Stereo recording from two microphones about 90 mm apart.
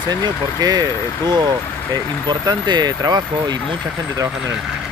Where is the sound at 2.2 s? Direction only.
55° right (ahead or behind).